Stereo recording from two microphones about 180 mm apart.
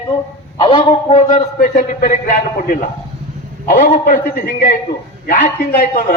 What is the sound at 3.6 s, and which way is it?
A man's voice, 50° left (ahead or behind).